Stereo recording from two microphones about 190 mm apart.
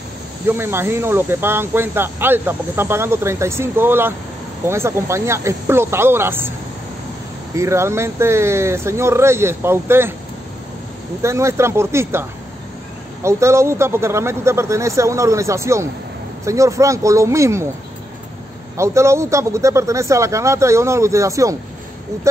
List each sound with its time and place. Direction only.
0.5 s speech: 10° right (ahead or behind)
7.5 s speech: 15° right (ahead or behind)
11.2 s speech: 15° right (ahead or behind)
18.8 s speech: 15° right (ahead or behind)